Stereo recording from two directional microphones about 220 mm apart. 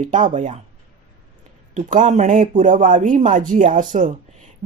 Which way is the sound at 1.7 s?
35° right (ahead or behind).